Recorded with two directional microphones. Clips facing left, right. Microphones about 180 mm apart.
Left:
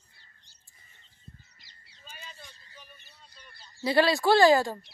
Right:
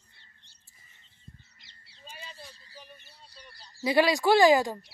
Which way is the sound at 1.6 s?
30° right (ahead or behind).